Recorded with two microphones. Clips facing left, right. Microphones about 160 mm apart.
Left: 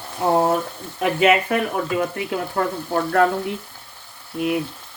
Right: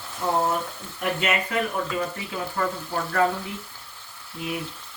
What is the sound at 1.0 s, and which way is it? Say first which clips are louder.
Speech: left 8 dB; 80° left.